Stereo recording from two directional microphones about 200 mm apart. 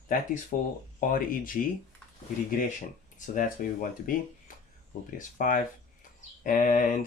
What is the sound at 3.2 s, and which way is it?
Speech, 40° left (ahead or behind).